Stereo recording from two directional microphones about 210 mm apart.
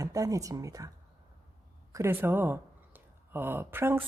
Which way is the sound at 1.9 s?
10° right (ahead or behind).